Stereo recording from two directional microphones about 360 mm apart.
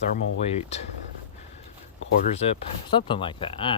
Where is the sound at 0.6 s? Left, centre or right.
Centre.